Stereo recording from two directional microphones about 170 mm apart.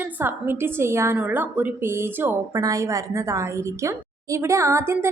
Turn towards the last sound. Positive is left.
turn(degrees=-15)  # may be behind; listen again after turning